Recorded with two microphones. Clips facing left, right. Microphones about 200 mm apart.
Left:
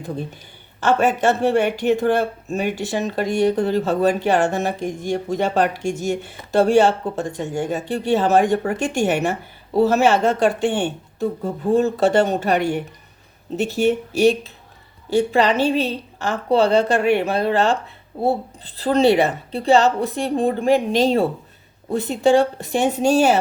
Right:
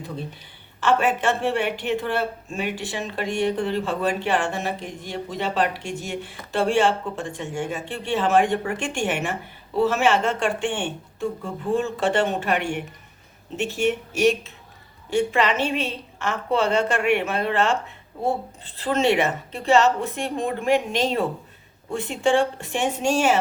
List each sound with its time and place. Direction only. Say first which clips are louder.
0.8 s speech: left 3 dB; 40° left (ahead or behind)